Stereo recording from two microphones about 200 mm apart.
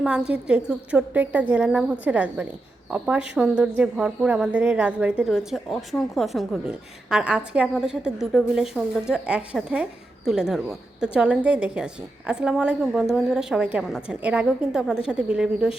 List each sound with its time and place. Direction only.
0.0 s a woman's voice: 5° right (ahead or behind)